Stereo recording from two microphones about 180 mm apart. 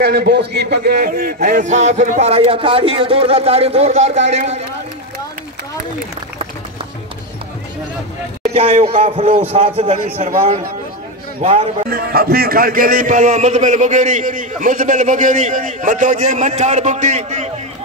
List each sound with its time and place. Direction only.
0.0 s a man's voice: 60° right (ahead or behind); by 4.6 s 40° right (ahead or behind)
8.5 s a man's voice: 35° right (ahead or behind)
11.9 s a man's voice: 55° right (ahead or behind); by 17.5 s 40° right (ahead or behind)